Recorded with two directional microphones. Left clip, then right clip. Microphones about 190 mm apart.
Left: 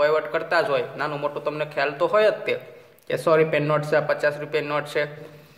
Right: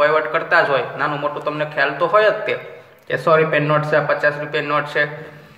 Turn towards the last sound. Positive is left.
turn(degrees=35)  # may be behind; listen again after turning